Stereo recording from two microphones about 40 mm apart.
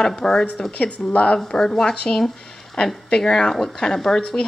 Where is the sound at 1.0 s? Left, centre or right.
Left.